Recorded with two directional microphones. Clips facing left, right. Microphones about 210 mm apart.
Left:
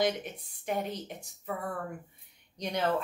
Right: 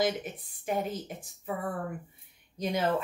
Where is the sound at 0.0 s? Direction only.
Centre (ahead or behind).